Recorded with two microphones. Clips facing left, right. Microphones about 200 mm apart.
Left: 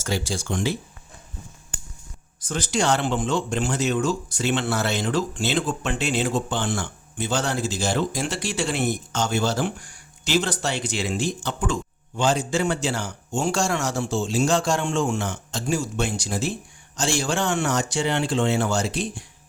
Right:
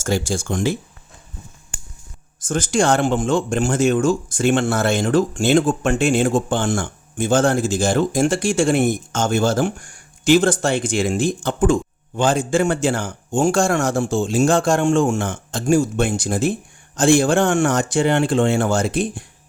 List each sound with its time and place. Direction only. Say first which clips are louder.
0.0 s speech: right 6 dB; 45° right (ahead or behind)
2.4 s speech: right 6 dB; 50° right (ahead or behind)